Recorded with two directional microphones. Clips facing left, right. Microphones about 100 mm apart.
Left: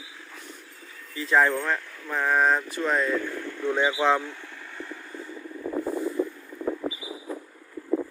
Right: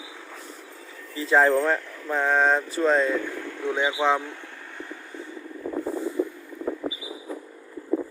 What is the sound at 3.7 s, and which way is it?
Speech, 10° right (ahead or behind).